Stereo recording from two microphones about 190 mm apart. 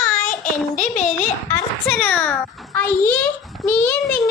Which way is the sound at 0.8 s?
40° left (ahead or behind).